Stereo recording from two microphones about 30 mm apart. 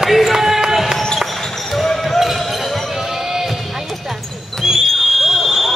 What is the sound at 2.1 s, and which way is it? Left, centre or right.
Basketball bounce, centre.